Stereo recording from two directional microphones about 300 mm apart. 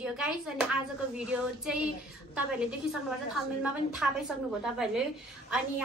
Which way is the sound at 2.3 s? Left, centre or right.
Centre.